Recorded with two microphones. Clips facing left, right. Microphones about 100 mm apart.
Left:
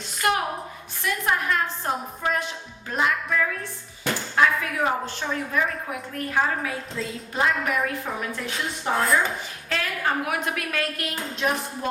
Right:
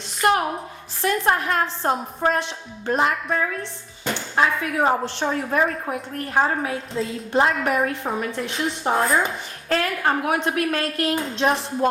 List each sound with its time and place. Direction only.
0.2 s a woman's voice: 35° right (ahead or behind)
3.6 s a woman's voice: 25° right (ahead or behind)
9.6 s a woman's voice: 40° right (ahead or behind)